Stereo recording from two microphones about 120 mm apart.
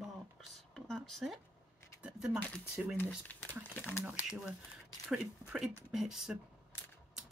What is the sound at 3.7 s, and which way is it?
Speech, 15° left (ahead or behind).